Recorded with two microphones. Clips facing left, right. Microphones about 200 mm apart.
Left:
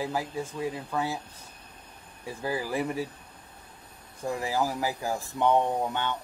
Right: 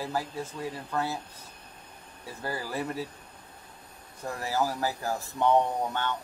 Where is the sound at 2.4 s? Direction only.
10° left (ahead or behind).